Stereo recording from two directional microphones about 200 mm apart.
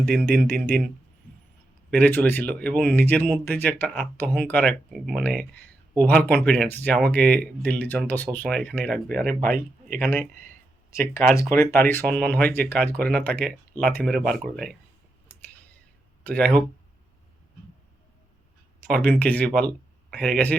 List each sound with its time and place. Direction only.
0.1 s speech: 5° left (ahead or behind)
1.9 s speech: 10° left (ahead or behind)
9.4 s a man's voice: 45° right (ahead or behind)
10.0 s speech: 10° left (ahead or behind)
11.5 s speech: 10° left (ahead or behind)
15.3 s a sound: 5° left (ahead or behind)
16.2 s speech: 5° left (ahead or behind)
18.9 s speech: 5° left (ahead or behind)